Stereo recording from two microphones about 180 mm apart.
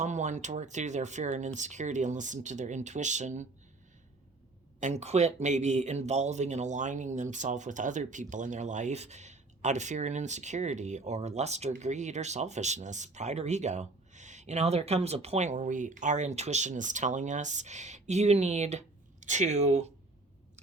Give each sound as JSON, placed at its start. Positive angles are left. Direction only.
{"t": 0.0, "sound": "speech", "side_deg": -40}
{"t": 4.8, "sound": "speech", "side_deg": -40}